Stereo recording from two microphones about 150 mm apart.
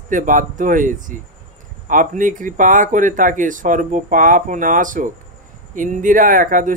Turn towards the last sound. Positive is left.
turn(degrees=-65)  # may be behind; listen again after turning